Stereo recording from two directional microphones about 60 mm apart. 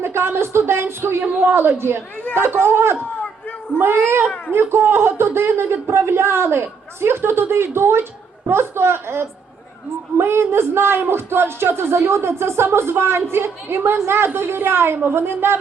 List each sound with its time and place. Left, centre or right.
0.0 s a woman's voice: right
1.2 s a woman's voice: right
1.5 s speech: right